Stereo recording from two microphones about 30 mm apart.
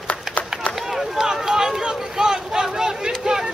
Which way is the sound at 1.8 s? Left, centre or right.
Right.